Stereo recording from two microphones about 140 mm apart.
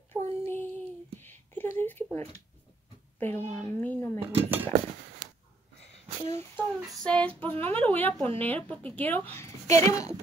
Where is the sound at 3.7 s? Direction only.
15° left (ahead or behind).